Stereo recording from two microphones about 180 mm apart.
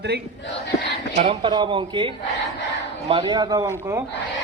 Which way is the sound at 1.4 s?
25° right (ahead or behind).